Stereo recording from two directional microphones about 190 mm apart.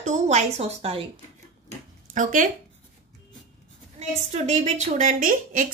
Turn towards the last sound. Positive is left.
turn(degrees=-45)  # may be behind; listen again after turning